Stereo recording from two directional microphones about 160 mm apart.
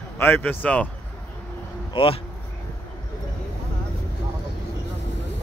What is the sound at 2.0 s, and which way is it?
Speech, 35° left (ahead or behind).